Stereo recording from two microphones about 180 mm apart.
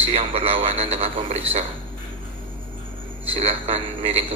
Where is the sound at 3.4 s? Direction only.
35° right (ahead or behind).